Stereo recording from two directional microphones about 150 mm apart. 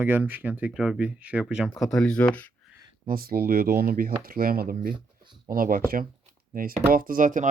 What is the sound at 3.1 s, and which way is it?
Speech, 80° right.